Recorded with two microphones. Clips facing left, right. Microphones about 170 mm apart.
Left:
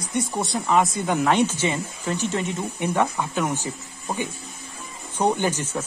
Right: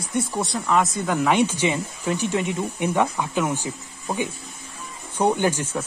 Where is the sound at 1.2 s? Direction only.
15° right (ahead or behind).